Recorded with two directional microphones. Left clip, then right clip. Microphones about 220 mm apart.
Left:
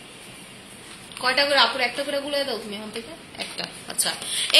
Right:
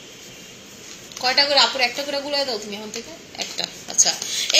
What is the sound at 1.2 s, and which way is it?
Speech, 10° left (ahead or behind).